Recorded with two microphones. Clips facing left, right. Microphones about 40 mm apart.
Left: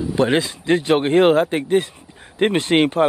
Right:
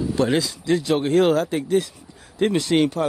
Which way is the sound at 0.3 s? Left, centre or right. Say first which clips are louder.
Left 3 dB; left.